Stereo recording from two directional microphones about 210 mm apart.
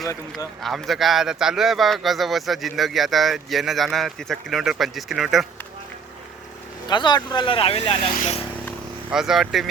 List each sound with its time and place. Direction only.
0.6 s speech: centre (ahead or behind)
6.8 s speech: 20° left (ahead or behind)
9.0 s speech: centre (ahead or behind)